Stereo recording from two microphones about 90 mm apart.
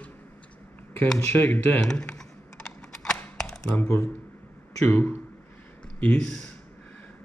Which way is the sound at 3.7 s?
15° left (ahead or behind).